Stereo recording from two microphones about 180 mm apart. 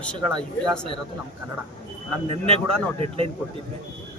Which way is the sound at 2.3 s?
30° right (ahead or behind).